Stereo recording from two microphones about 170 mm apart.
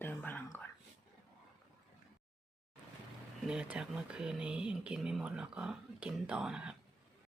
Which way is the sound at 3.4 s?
5° right (ahead or behind).